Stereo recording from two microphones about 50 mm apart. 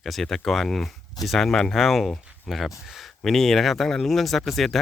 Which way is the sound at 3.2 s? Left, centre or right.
Centre.